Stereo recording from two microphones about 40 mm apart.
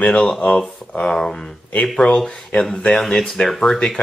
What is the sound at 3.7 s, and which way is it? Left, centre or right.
Speech, left.